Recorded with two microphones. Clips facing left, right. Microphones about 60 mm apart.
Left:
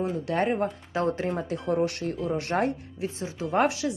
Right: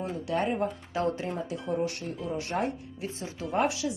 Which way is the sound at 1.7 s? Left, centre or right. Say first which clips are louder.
Left 4 dB; left.